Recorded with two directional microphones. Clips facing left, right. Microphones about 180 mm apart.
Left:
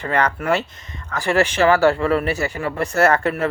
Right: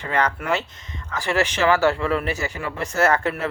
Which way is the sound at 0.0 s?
55° left (ahead or behind).